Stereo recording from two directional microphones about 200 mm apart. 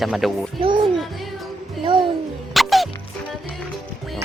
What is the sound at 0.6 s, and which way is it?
Speech, 25° right (ahead or behind).